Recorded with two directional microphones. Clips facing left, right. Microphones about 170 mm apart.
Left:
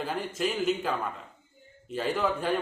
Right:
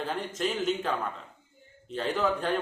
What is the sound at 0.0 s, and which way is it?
A man's voice, 5° left (ahead or behind).